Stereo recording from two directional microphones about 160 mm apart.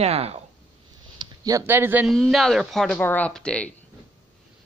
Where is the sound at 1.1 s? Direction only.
25° right (ahead or behind).